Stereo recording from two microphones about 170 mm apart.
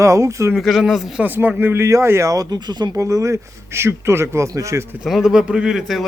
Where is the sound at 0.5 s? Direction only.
Centre (ahead or behind); by 4.9 s 15° right (ahead or behind).